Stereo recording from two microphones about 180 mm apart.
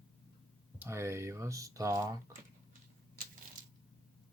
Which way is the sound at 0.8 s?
15° right (ahead or behind).